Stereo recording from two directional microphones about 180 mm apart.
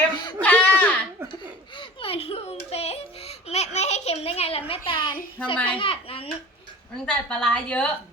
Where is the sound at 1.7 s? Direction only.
30° left (ahead or behind).